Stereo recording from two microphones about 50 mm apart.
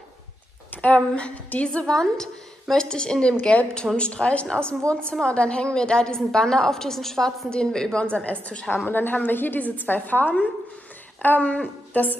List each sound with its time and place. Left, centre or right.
0.7 s a woman's voice: left
8.7 s a woman's voice: left